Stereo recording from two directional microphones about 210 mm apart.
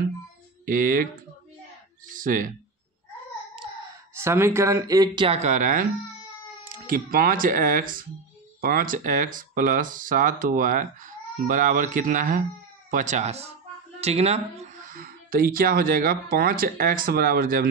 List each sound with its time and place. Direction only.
0.7 s speech: 40° right (ahead or behind)
2.1 s speech: 40° right (ahead or behind)
4.2 s speech: 10° right (ahead or behind); by 17.6 s 45° right (ahead or behind)